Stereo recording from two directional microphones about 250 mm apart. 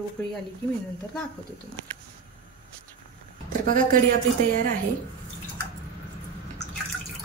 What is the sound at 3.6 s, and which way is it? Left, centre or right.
A woman's voice, right.